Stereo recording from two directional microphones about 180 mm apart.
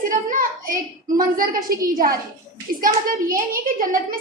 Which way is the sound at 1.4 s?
50° right (ahead or behind).